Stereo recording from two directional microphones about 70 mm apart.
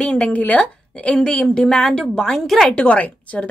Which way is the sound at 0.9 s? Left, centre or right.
Centre.